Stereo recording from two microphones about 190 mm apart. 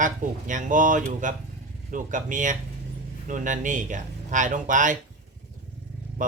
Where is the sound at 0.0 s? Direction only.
40° right (ahead or behind).